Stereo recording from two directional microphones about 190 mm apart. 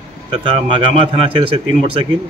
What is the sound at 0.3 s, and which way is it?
A man's voice, 25° right (ahead or behind).